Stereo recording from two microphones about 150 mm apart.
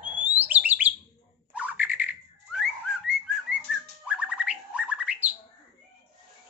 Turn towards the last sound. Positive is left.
turn(degrees=-10)  # may be behind; listen again after turning